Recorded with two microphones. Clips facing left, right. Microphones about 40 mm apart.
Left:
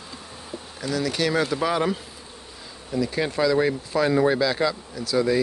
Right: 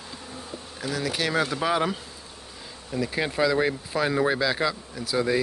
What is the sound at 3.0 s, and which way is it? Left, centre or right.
Speech, centre.